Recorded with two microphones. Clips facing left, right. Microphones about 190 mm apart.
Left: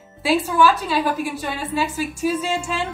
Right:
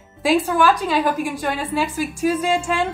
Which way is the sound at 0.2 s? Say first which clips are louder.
Even; 15° right (ahead or behind).